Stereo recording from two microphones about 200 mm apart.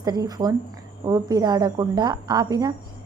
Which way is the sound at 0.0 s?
20° right (ahead or behind).